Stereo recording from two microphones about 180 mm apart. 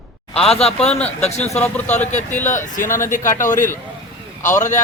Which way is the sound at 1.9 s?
40° left (ahead or behind).